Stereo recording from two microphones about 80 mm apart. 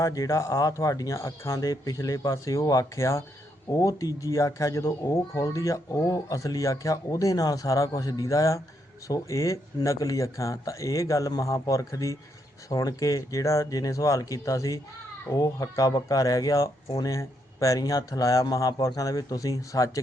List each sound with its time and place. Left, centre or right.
0.0 s speech: left